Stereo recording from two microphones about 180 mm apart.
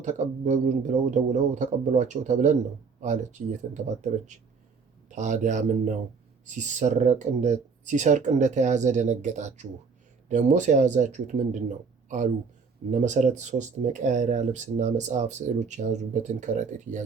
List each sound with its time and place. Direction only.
0.0 s speech: 40° right (ahead or behind)